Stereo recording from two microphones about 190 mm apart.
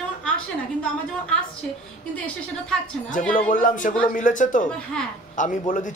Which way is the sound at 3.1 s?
45° left (ahead or behind).